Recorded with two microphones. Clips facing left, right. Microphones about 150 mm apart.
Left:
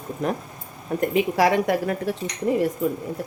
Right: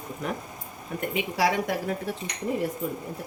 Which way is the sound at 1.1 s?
40° left (ahead or behind).